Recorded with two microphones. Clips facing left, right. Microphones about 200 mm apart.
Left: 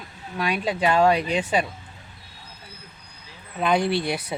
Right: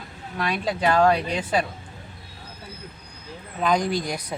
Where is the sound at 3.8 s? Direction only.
40° right (ahead or behind).